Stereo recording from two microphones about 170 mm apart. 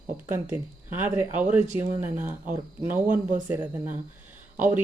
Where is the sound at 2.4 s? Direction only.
50° right (ahead or behind).